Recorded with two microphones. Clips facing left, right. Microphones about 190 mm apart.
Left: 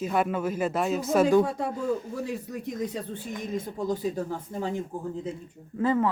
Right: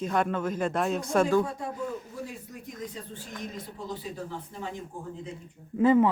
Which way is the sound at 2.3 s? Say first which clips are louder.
Left 9 dB; 70° left (ahead or behind).